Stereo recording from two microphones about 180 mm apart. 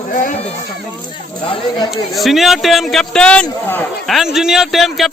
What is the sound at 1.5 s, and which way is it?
Speech, 30° left (ahead or behind).